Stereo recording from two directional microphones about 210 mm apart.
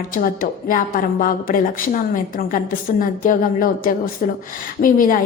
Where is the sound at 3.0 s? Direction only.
40° left (ahead or behind).